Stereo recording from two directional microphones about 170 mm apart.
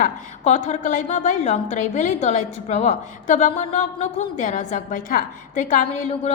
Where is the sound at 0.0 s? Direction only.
45° left (ahead or behind).